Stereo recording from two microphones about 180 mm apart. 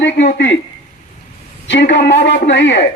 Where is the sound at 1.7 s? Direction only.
75° left (ahead or behind).